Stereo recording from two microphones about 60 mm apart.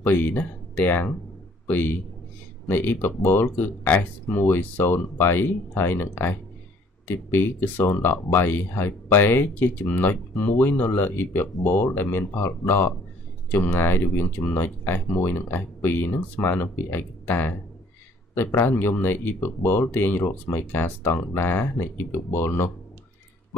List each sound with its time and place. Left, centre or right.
0.0 s speech: left
18.7 s speech: left